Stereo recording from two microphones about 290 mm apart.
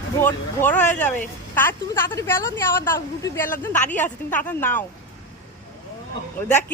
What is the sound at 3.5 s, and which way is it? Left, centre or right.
Speech, left.